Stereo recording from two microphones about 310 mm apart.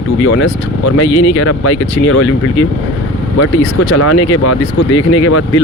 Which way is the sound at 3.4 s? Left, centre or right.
Left.